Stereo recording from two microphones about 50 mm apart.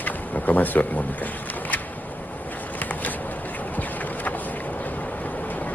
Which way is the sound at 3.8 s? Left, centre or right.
Left.